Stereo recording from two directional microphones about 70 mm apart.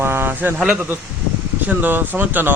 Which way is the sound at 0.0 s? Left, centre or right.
Right.